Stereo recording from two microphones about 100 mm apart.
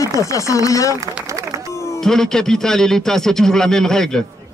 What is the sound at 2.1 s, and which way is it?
A man's voice, 5° left (ahead or behind).